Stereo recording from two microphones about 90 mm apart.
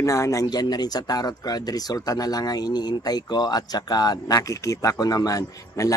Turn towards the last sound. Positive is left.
turn(degrees=40)  # may be behind; listen again after turning